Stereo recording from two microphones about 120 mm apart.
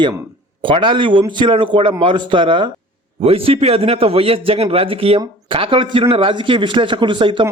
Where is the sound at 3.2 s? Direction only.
55° right (ahead or behind).